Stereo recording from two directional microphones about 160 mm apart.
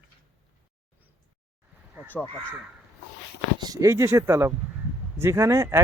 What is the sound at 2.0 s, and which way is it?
Speech, 10° left (ahead or behind).